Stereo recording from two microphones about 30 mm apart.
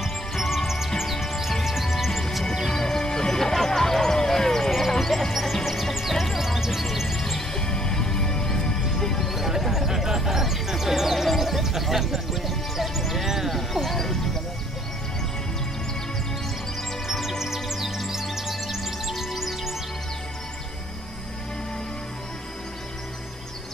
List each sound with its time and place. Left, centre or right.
0.0 s music: centre
2.7 s music: centre
4.6 s music: centre
5.3 s music: centre
7.5 s music: left
9.3 s horse: centre
13.5 s music: centre
17.1 s music: centre